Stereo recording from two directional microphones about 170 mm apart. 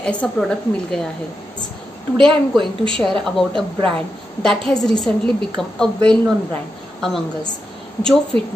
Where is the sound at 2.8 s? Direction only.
5° left (ahead or behind).